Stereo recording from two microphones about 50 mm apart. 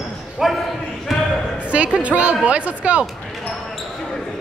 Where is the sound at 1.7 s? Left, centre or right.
Right.